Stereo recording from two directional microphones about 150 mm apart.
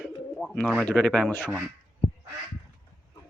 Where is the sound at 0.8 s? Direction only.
5° left (ahead or behind).